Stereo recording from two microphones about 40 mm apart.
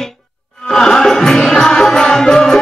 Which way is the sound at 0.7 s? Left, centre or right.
Centre.